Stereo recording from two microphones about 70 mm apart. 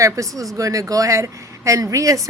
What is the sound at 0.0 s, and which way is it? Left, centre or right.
Speech, right.